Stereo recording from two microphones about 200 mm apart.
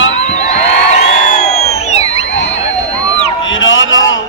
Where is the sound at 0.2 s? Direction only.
35° left (ahead or behind).